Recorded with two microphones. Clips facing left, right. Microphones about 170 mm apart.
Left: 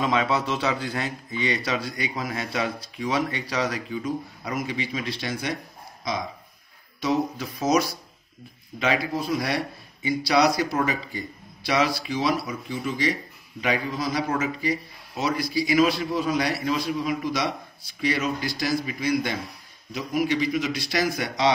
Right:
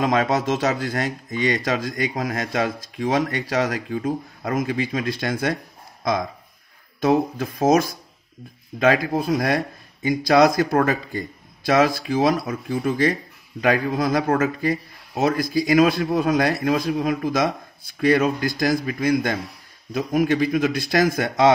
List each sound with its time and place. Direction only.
0.0 s speech: 45° right (ahead or behind)